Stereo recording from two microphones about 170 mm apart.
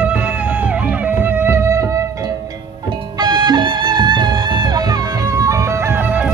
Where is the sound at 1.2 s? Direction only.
10° right (ahead or behind).